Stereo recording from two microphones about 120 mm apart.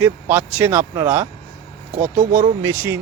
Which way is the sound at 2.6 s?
20° right (ahead or behind).